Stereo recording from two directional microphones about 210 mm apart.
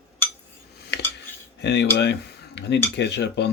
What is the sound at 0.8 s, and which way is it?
Cutlery, 55° left (ahead or behind).